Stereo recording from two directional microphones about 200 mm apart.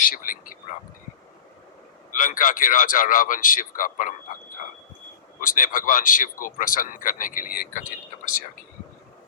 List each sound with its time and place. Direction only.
0.0 s speech: 45° left (ahead or behind)
2.1 s speech: 45° left (ahead or behind)
5.4 s speech: 45° left (ahead or behind)